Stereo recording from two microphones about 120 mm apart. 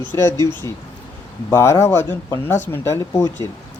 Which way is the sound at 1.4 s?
25° left (ahead or behind).